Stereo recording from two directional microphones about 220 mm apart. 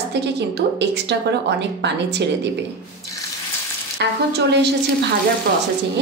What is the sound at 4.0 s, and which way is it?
Speech, 50° right (ahead or behind).